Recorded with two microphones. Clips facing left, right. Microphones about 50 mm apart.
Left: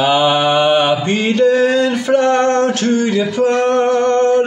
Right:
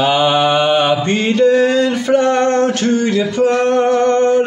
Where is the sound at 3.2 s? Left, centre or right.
Centre.